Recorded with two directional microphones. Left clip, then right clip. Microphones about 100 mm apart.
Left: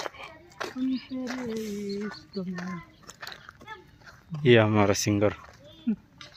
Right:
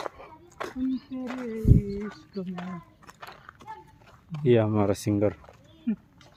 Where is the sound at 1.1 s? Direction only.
30° right (ahead or behind).